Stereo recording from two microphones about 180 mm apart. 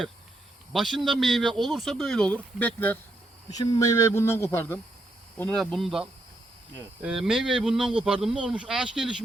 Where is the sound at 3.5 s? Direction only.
20° left (ahead or behind).